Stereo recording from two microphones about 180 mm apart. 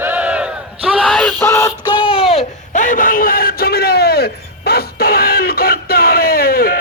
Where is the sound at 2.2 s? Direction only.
35° left (ahead or behind).